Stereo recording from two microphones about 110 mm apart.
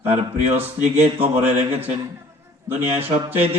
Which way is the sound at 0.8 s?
80° right.